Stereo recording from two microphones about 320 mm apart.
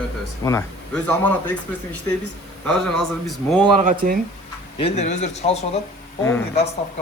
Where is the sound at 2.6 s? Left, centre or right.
Centre.